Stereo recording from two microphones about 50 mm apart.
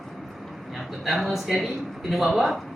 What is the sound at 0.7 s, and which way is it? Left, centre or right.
Speech, centre.